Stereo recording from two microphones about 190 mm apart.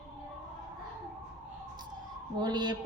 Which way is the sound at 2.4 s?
25° right (ahead or behind).